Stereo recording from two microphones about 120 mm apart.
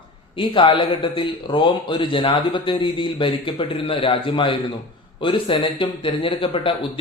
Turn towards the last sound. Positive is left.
turn(degrees=50)  # may be behind; listen again after turning